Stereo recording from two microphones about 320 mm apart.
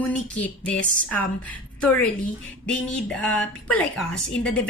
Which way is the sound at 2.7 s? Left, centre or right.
Centre.